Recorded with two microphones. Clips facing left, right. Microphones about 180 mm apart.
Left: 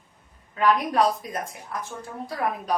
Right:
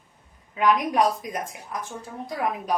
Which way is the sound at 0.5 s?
15° right (ahead or behind).